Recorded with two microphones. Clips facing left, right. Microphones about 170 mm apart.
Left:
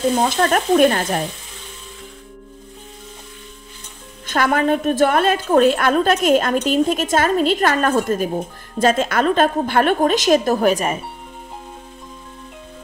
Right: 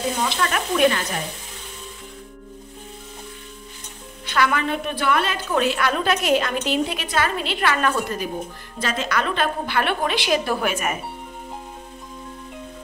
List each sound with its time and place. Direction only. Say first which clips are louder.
0.2 s a woman's voice: left 6 dB; 45° left (ahead or behind)
4.3 s a woman's voice: left 5 dB; 45° left (ahead or behind)